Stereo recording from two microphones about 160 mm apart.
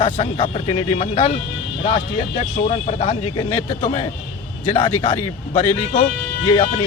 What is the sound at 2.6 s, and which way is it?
Speech, 45° left (ahead or behind).